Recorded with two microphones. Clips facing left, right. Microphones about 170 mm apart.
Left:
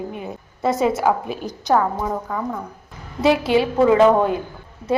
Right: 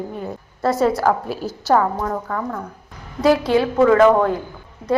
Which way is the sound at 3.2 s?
25° left (ahead or behind).